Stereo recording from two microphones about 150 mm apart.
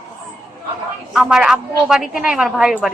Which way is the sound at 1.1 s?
5° right (ahead or behind).